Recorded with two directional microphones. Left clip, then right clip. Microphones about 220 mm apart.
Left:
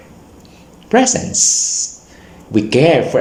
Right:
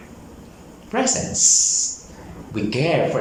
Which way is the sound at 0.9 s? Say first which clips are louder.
Left 8 dB; 40° left (ahead or behind).